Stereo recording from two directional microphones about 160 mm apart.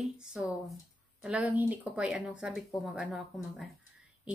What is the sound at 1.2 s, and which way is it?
Speech, 5° right (ahead or behind).